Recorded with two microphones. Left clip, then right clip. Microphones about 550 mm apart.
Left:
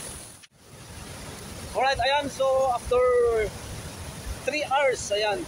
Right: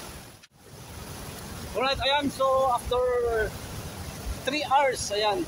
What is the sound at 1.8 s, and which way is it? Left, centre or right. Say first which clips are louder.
Speech: left 2 dB; right.